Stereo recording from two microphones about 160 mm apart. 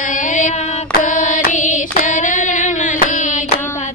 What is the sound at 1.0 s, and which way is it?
Singing, 50° left (ahead or behind).